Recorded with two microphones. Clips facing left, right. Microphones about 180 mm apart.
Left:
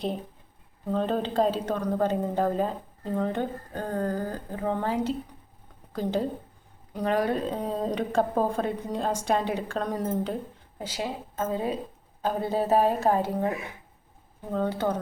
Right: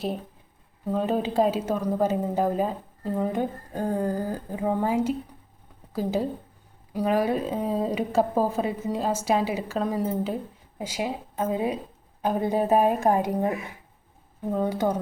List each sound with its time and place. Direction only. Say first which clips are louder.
0.9 s a woman's voice: right 2 dB; 5° right (ahead or behind)
14.5 s a woman's voice: right 2 dB; 10° right (ahead or behind)